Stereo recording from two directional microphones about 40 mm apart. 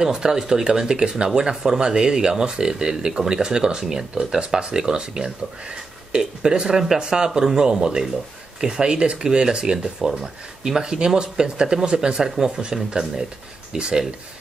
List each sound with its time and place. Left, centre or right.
0.0 s speech: centre
12.2 s speech: centre